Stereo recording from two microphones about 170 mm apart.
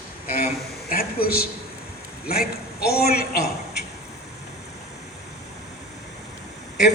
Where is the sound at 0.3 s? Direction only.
60° left (ahead or behind).